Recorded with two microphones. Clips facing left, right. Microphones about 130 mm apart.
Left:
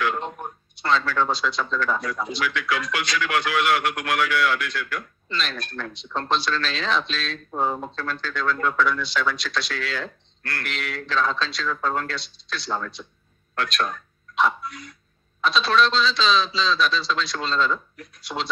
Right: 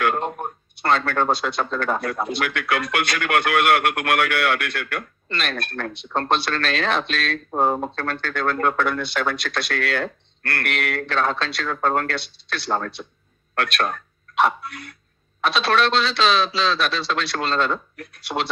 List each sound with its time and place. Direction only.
0.0 s speech: 55° right (ahead or behind)